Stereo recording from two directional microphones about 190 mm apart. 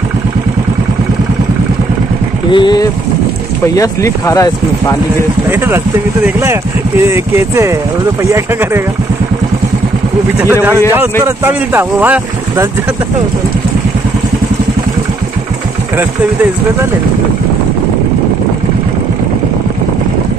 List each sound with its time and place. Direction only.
2.5 s speech: 25° left (ahead or behind)
5.5 s speech: 10° right (ahead or behind)
10.4 s speech: 15° right (ahead or behind)